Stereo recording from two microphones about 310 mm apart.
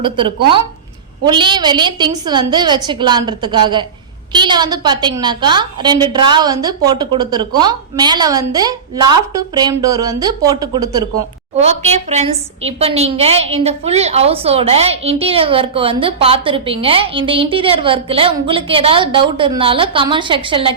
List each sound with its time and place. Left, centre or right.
0.0 s a woman's voice: centre